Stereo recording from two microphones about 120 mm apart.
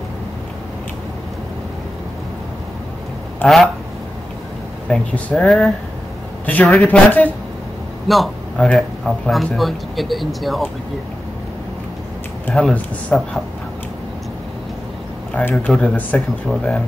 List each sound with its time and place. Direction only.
3.4 s speech: 15° left (ahead or behind)
4.8 s a man's voice: 5° left (ahead or behind)
12.6 s speech: 5° left (ahead or behind)
15.3 s speech: 10° left (ahead or behind)